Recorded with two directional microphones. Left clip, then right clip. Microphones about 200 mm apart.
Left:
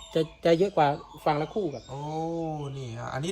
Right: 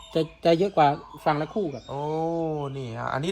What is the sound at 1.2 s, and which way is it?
Speech, 45° right (ahead or behind).